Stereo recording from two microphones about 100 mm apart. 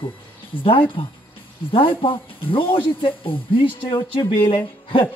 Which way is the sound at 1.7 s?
65° left (ahead or behind).